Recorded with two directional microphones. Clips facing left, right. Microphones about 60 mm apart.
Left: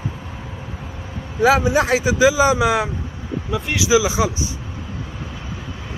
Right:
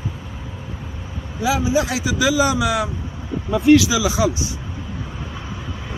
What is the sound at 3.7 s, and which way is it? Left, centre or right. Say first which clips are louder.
Speech: right 1 dB; left.